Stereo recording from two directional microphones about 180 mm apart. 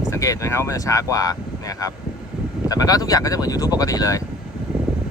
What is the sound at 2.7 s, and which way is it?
Speech, 20° left (ahead or behind).